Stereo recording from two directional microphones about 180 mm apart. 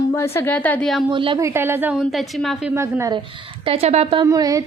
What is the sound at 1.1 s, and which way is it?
Speech, 25° right (ahead or behind).